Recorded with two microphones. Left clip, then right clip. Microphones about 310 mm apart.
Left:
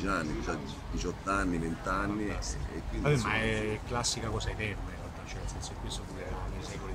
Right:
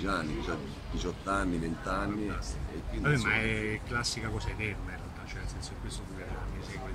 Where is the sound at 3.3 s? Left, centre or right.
Centre.